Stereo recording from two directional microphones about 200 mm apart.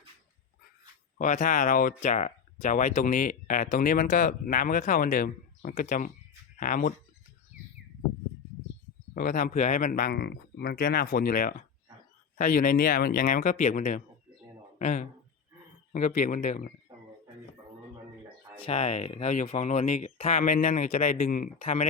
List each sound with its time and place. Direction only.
1.2 s speech: 40° left (ahead or behind)
9.1 s speech: 40° left (ahead or behind)
16.9 s a sound: 25° right (ahead or behind)
18.5 s speech: 30° left (ahead or behind)
21.6 s speech: 30° left (ahead or behind)